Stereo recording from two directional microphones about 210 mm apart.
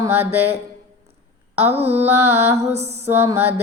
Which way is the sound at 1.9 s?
10° right (ahead or behind).